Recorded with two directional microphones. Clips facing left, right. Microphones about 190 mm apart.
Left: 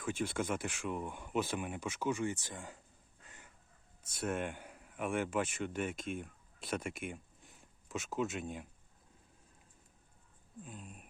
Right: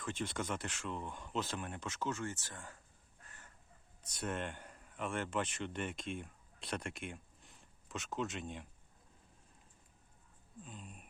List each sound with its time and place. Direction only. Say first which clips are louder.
0.0 s speech: left 4 dB; 10° left (ahead or behind)
3.2 s crow: left 2 dB; 15° left (ahead or behind)
4.1 s speech: left 3 dB; 10° left (ahead or behind)
10.6 s speech: left 2 dB; 5° left (ahead or behind)